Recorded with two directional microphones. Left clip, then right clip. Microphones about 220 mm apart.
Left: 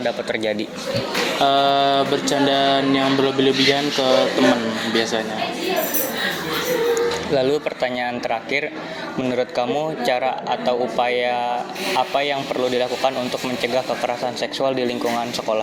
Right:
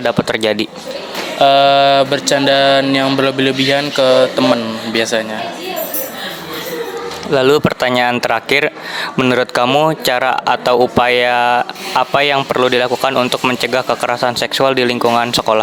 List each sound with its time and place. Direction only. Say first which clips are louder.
0.0 s speech: right 7 dB; 40° right (ahead or behind)
1.4 s a sound: right 8 dB; 45° right (ahead or behind)
7.3 s speech: right 10 dB; 35° right (ahead or behind)